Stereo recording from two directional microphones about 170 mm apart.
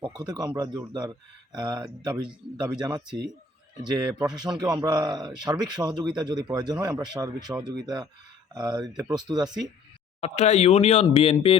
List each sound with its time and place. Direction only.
0.0 s speech: 25° right (ahead or behind)
4.4 s speech: 20° right (ahead or behind)
10.2 s speech: 40° left (ahead or behind)